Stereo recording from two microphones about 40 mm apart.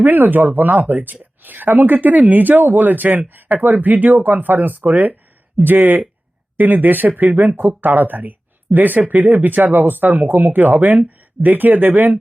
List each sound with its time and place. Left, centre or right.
0.0 s speech: right